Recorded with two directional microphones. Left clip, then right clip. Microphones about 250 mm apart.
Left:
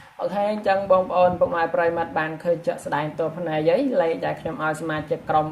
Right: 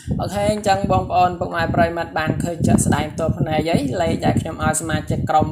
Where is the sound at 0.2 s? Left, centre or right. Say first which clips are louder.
Right 2 dB; right.